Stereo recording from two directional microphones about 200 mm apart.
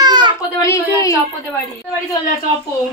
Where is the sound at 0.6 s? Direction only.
15° left (ahead or behind).